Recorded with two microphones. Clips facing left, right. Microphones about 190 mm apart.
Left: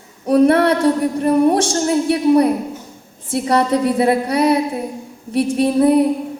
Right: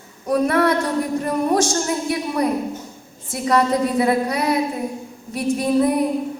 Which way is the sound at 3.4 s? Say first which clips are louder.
Left 2 dB; 30° left (ahead or behind).